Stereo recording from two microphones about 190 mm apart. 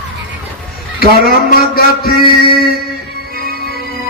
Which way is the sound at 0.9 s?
50° left (ahead or behind).